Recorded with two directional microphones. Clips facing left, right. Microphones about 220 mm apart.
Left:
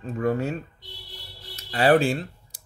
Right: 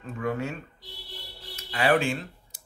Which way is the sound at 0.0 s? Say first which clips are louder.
Left 5 dB; 35° left (ahead or behind).